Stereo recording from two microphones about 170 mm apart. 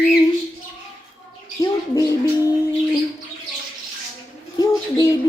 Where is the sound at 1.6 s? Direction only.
20° left (ahead or behind).